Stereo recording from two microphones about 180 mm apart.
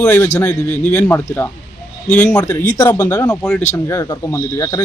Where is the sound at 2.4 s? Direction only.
20° left (ahead or behind).